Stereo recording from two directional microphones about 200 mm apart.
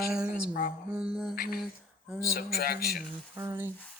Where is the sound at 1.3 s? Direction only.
50° left (ahead or behind).